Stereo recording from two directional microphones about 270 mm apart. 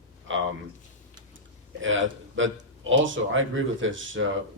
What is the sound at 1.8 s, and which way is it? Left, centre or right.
Speech, right.